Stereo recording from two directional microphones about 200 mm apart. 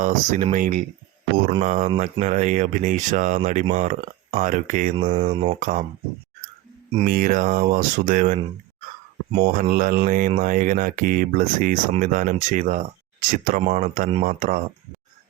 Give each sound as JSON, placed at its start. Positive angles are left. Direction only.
{"t": 0.0, "sound": "speech", "side_deg": -40}
{"t": 4.9, "sound": "speech", "side_deg": -25}
{"t": 5.5, "sound": "speech", "side_deg": -45}
{"t": 7.0, "sound": "speech", "side_deg": -45}
{"t": 9.4, "sound": "speech", "side_deg": -45}